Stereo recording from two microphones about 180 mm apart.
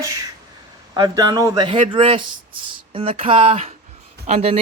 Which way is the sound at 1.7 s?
35° right (ahead or behind).